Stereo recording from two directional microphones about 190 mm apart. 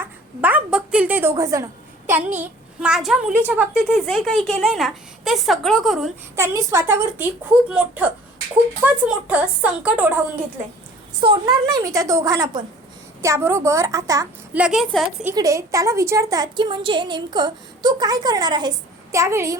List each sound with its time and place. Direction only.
0.0 s a sound: 10° right (ahead or behind)
1.4 s a woman's voice: 15° right (ahead or behind)
2.4 s a woman's voice: 5° right (ahead or behind)
6.3 s a woman's voice: 15° right (ahead or behind)
11.2 s a woman's voice: 20° right (ahead or behind)
14.6 s a woman's voice: centre (ahead or behind)
15.3 s a woman's voice: 15° right (ahead or behind)